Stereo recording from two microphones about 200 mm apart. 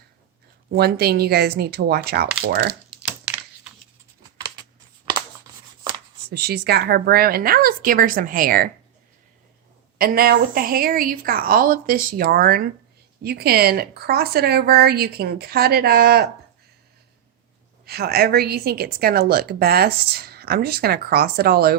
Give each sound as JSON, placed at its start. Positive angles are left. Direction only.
{"t": 0.7, "sound": "a woman's voice", "side_deg": -50}
{"t": 3.0, "sound": "typewriter", "side_deg": -5}
{"t": 6.3, "sound": "a woman's voice", "side_deg": -50}
{"t": 10.0, "sound": "a woman's voice", "side_deg": -50}
{"t": 17.8, "sound": "a woman's voice", "side_deg": -50}